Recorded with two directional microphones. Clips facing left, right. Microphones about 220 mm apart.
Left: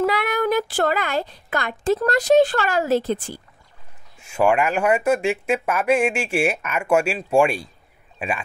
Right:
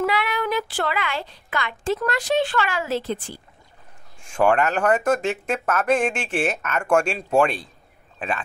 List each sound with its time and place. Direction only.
0.0 s speech: 45° left (ahead or behind)
4.2 s speech: 10° left (ahead or behind)